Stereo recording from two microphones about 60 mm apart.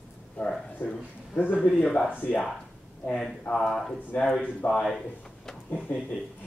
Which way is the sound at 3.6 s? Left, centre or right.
Centre.